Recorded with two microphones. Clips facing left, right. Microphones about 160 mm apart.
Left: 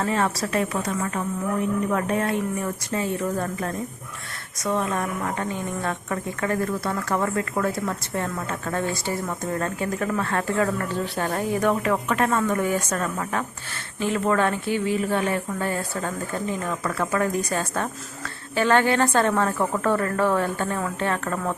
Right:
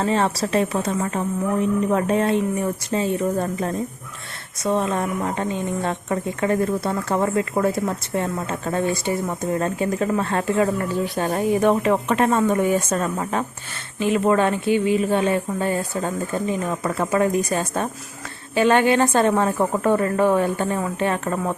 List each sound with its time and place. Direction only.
0.0 s a woman's voice: 25° right (ahead or behind)